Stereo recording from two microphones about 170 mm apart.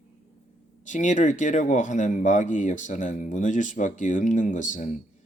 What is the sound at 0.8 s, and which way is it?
Speech, 45° left (ahead or behind).